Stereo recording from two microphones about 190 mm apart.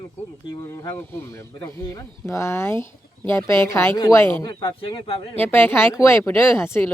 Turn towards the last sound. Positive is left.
turn(degrees=15)  # may be behind; listen again after turning